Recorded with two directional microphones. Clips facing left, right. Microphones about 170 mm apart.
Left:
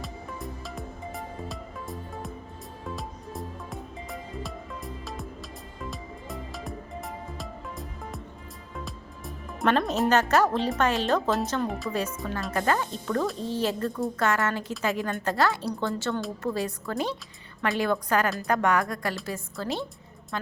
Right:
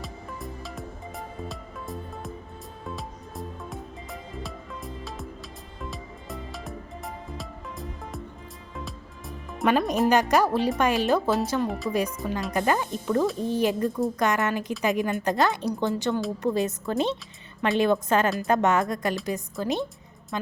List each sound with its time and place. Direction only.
0.0 s music: centre (ahead or behind)
10.1 s speech: 10° right (ahead or behind)
11.9 s a woman's voice: 15° right (ahead or behind)